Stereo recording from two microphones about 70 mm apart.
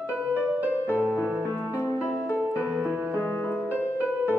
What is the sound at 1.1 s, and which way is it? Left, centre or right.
Music, right.